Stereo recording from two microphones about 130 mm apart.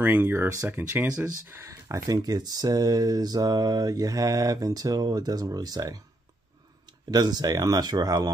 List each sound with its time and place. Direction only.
0.0 s speech: 15° right (ahead or behind)
1.5 s speech: 20° right (ahead or behind)